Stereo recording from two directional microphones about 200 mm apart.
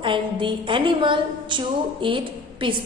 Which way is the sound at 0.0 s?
25° right (ahead or behind).